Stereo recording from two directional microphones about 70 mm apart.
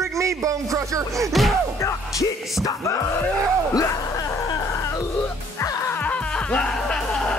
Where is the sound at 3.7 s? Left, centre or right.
Left.